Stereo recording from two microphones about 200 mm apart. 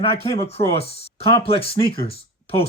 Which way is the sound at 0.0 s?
30° left (ahead or behind).